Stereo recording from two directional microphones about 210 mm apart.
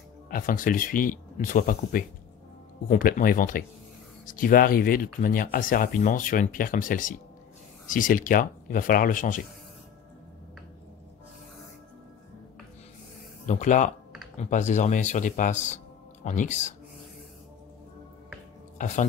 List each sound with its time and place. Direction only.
0.3 s speech: 40° left (ahead or behind)
13.5 s speech: 35° left (ahead or behind)
18.8 s speech: 35° left (ahead or behind)